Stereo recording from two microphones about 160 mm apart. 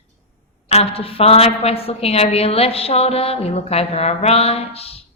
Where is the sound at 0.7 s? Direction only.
40° left (ahead or behind).